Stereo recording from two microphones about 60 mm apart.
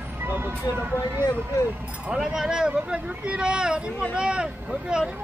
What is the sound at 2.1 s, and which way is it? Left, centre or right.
Speech, centre.